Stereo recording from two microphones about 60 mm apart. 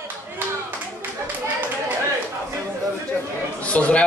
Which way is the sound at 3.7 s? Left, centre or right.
Left.